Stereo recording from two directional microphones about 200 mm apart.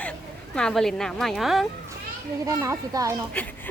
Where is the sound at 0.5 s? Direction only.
5° left (ahead or behind).